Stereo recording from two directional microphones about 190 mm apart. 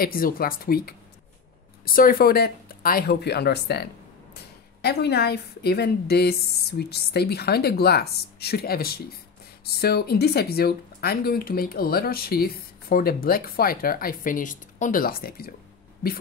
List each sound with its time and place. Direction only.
0.0 s speech: 50° left (ahead or behind)
2.0 s speech: 50° left (ahead or behind)
4.8 s speech: 60° left (ahead or behind)